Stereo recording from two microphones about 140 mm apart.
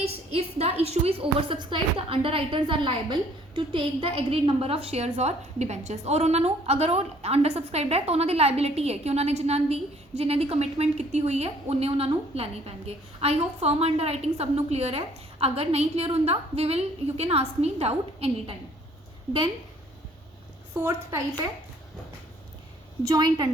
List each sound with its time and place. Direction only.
0.0 s a woman's voice: 45° right (ahead or behind)
20.8 s a woman's voice: 20° right (ahead or behind)
23.0 s a woman's voice: 30° right (ahead or behind)